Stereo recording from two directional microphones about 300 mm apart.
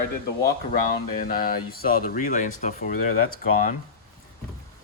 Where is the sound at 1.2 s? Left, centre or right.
Left.